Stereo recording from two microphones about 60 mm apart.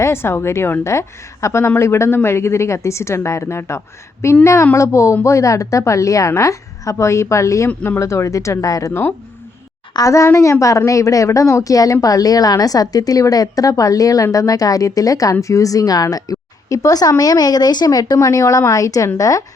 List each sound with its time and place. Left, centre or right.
0.0 s speech: left
8.9 s speech: left
10.0 s speech: left
12.0 s a woman's voice: left